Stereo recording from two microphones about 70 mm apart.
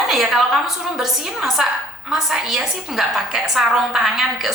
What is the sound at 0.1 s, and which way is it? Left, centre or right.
A woman's voice, centre.